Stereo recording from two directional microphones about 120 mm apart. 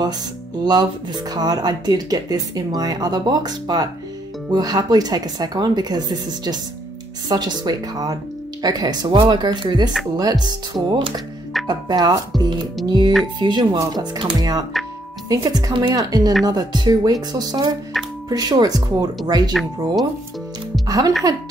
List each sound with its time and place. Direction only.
0.7 s speech: 35° right (ahead or behind)
17.9 s speech: centre (ahead or behind)
18.3 s speech: 30° right (ahead or behind)
20.8 s speech: 30° right (ahead or behind)